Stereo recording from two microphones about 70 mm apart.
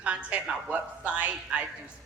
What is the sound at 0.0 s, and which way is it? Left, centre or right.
A woman's voice, centre.